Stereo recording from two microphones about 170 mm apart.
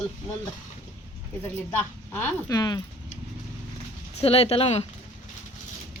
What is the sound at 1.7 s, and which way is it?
Speech, 10° left (ahead or behind).